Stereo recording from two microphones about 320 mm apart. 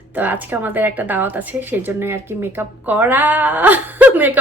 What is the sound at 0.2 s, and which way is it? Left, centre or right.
A woman's voice, centre.